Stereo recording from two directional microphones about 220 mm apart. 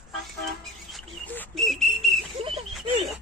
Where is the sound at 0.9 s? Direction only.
5° left (ahead or behind).